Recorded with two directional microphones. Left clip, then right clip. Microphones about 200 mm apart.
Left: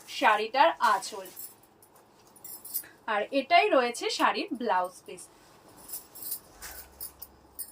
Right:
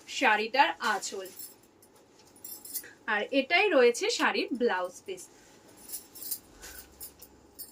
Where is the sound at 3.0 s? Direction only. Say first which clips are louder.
Left 1 dB; 20° right (ahead or behind).